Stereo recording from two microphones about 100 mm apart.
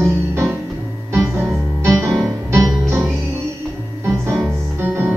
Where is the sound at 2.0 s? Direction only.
25° right (ahead or behind).